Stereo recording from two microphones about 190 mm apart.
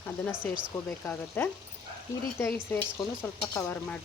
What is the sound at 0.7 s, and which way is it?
Speech, 5° left (ahead or behind).